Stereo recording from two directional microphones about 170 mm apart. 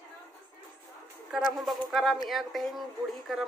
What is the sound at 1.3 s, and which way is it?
A woman's voice, centre (ahead or behind).